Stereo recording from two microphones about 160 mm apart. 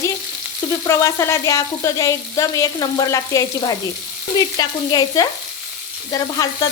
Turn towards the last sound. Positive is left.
turn(degrees=25)  # may be behind; listen again after turning